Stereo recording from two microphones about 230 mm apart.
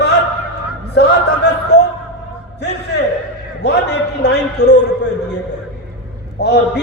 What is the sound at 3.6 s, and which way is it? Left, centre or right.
A man's voice, left.